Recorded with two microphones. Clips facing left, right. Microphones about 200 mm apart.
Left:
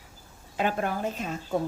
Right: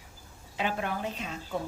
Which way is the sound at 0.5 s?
45° left (ahead or behind).